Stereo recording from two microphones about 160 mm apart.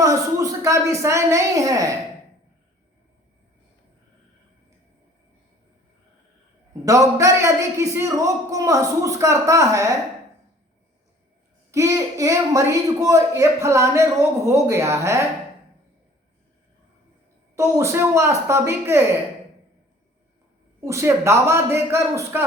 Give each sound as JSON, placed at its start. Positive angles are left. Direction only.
{"t": 0.0, "sound": "a man's voice", "side_deg": -20}
{"t": 6.8, "sound": "a man's voice", "side_deg": -20}
{"t": 11.7, "sound": "a man's voice", "side_deg": -20}
{"t": 17.5, "sound": "a man's voice", "side_deg": -15}
{"t": 20.8, "sound": "a man's voice", "side_deg": -20}